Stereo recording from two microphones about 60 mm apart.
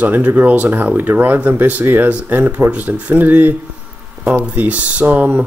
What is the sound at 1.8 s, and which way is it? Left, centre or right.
Speech, right.